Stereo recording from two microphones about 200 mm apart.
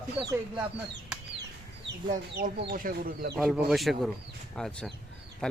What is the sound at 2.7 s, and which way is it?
Speech, 45° right (ahead or behind).